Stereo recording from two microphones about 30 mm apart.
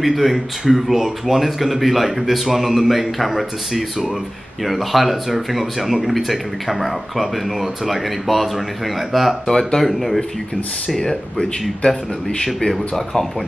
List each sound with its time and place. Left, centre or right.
0.0 s speech: centre
9.5 s speech: centre
9.8 s speech: centre